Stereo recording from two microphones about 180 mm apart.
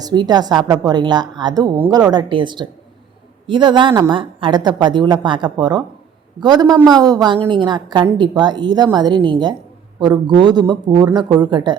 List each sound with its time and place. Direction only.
0.0 s a woman's voice: 25° right (ahead or behind)